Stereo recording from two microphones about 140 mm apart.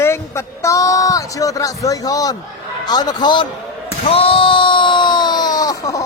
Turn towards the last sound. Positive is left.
turn(degrees=25)  # may be behind; listen again after turning